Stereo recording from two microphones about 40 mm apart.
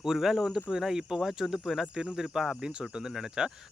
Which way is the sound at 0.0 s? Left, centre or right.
Centre.